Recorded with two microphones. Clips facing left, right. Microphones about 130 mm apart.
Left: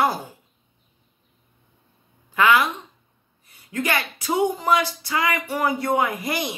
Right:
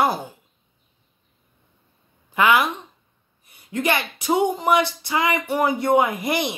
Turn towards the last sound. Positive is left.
turn(degrees=-20)  # may be behind; listen again after turning